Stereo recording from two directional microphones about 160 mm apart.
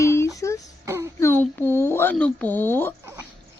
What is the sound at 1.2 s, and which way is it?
Speech, 15° left (ahead or behind).